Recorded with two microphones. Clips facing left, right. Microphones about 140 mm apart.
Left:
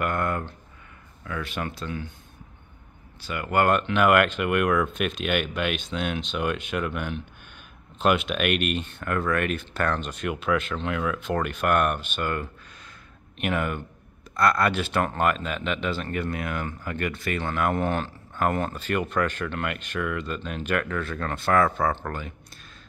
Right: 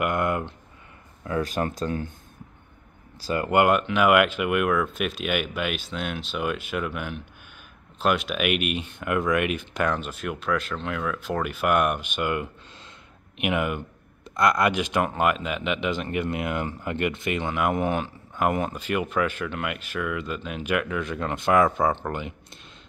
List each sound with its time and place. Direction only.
0.0 s speech: 15° right (ahead or behind)
1.2 s speech: 35° right (ahead or behind)
3.3 s speech: 30° right (ahead or behind)
3.5 s speech: 10° right (ahead or behind)